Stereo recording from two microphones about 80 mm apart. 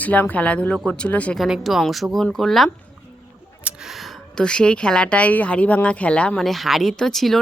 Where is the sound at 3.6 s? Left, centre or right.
Centre.